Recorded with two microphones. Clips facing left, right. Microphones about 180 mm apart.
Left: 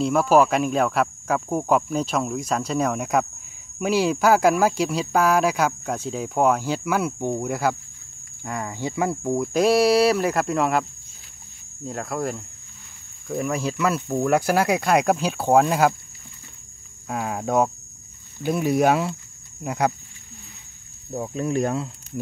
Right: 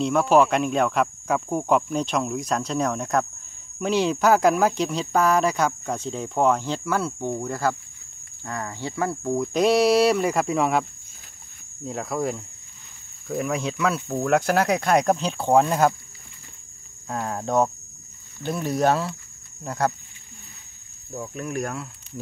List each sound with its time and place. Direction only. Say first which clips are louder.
0.0 s speech: left 1 dB; 5° left (ahead or behind)
17.1 s speech: left 1 dB; 10° left (ahead or behind)
21.1 s speech: left 5 dB; 30° left (ahead or behind)